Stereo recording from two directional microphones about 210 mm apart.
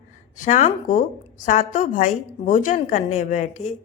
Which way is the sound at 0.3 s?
35° left (ahead or behind).